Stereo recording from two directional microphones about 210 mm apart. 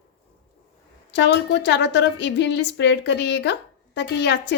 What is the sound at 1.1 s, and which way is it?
A woman's voice, 55° left (ahead or behind).